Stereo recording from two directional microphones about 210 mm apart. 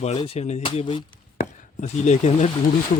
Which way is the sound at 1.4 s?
35° left (ahead or behind).